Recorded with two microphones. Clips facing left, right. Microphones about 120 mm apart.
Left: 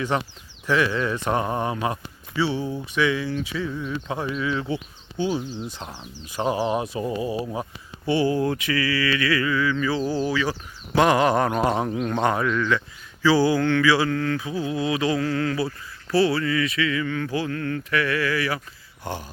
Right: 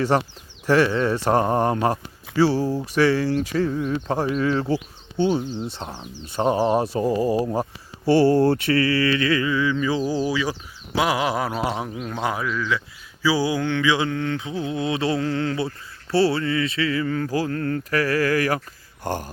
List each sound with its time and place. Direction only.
0.7 s speech: 30° right (ahead or behind)
4.7 s mantra: 30° right (ahead or behind)
6.3 s speech: 30° right (ahead or behind)
7.5 s mantra: 35° right (ahead or behind)
9.7 s speech: 15° right (ahead or behind)
13.2 s mantra: 10° right (ahead or behind)
16.1 s speech: 30° right (ahead or behind); by 18.6 s 45° right (ahead or behind)
19.0 s a sound: 45° right (ahead or behind)